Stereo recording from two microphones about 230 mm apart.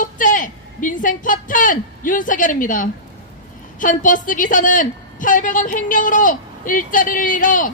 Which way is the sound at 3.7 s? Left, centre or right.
Left.